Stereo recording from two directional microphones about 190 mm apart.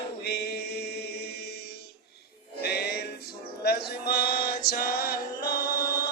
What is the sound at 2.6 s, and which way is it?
Music, 55° left (ahead or behind).